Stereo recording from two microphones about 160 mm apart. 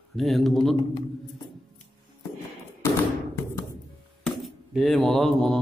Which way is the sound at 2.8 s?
15° left (ahead or behind).